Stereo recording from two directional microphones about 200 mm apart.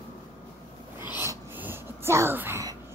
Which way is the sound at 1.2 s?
10° right (ahead or behind).